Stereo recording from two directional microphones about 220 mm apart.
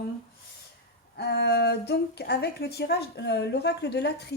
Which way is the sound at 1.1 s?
50° left (ahead or behind).